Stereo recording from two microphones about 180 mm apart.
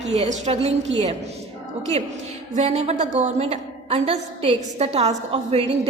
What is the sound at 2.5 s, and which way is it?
A woman's voice, 35° right (ahead or behind).